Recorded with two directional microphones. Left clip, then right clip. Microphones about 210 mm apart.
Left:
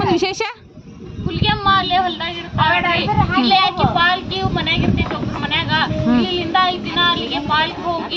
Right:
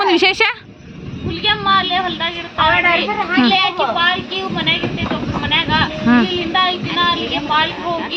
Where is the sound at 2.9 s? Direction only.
5° right (ahead or behind).